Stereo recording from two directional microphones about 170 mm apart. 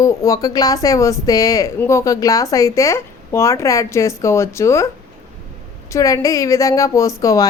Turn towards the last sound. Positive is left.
turn(degrees=20)  # may be behind; listen again after turning